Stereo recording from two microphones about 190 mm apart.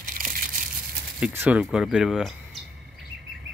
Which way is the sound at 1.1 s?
10° right (ahead or behind).